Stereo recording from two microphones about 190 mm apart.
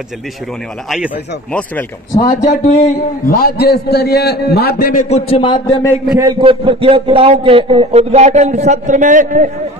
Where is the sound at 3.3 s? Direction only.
50° left (ahead or behind); by 5.9 s 25° left (ahead or behind).